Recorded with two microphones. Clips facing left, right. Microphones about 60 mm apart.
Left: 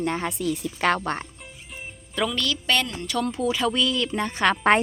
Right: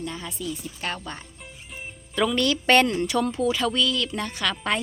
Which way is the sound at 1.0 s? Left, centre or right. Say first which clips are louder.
Left 9 dB; left.